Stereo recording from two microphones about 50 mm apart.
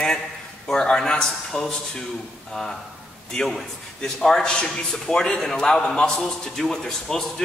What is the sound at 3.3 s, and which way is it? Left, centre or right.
A man's voice, centre.